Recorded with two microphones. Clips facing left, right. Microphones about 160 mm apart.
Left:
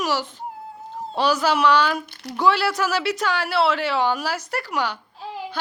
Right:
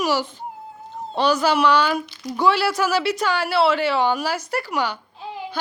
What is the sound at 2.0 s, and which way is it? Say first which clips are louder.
Speech: right 4 dB; 65° left (ahead or behind).